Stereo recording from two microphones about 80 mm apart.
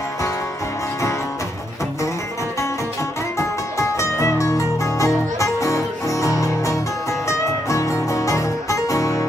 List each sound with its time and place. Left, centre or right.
3.3 s music: left